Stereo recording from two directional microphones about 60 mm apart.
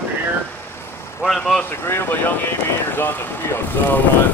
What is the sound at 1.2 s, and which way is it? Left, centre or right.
Speech, centre.